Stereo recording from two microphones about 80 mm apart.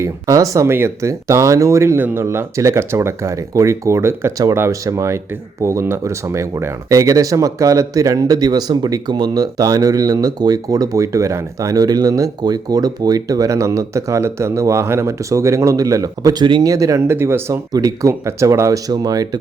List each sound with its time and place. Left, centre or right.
0.0 s speech: right
16.4 s speech: right
16.6 s speech: right
17.1 s speech: right
17.7 s speech: right
18.1 s speech: right